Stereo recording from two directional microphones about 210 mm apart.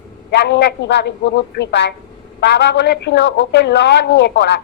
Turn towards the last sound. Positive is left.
turn(degrees=55)  # may be behind; listen again after turning